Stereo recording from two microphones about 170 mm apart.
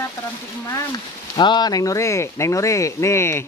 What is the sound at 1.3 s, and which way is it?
Speech, 25° left (ahead or behind).